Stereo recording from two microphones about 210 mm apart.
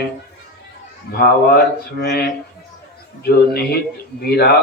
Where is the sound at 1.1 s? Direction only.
50° left (ahead or behind).